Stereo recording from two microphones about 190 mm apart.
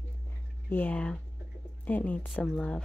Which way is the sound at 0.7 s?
10° left (ahead or behind).